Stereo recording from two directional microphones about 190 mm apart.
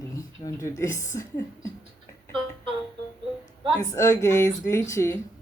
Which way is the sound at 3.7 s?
15° left (ahead or behind).